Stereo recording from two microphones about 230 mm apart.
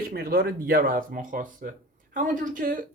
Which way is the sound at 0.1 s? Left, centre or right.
Right.